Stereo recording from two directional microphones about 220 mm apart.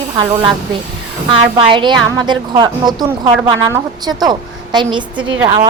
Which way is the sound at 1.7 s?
20° right (ahead or behind).